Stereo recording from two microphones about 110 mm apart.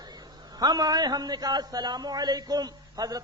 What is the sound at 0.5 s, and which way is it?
A man's voice, 40° right (ahead or behind).